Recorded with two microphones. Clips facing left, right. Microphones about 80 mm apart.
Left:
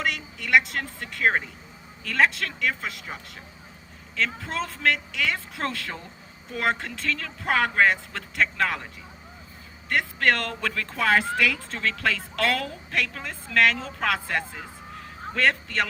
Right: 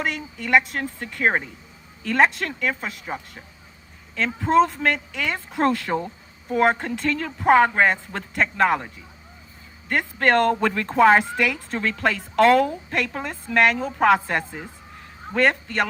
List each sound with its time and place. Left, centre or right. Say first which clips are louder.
0.0 s a woman's voice: right 2 dB; right
4.1 s a woman's voice: right 10 dB; right
9.9 s a woman's voice: right 4 dB; right